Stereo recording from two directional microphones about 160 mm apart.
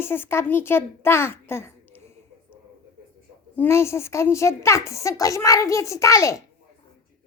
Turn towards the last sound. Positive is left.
turn(degrees=20)  # may be behind; listen again after turning